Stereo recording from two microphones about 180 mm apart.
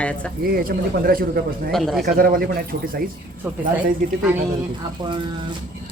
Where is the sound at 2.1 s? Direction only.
55° right (ahead or behind).